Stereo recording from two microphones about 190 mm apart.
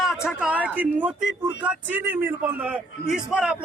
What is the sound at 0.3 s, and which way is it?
A man's voice, 5° right (ahead or behind).